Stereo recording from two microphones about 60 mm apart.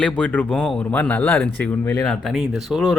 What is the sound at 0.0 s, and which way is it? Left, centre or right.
Speech, left.